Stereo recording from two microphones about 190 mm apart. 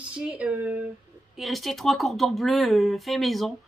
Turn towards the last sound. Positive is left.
turn(degrees=0)  # may be behind; listen again after turning